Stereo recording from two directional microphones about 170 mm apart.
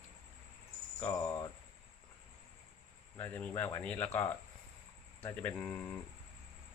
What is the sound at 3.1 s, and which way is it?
Speech, 10° left (ahead or behind).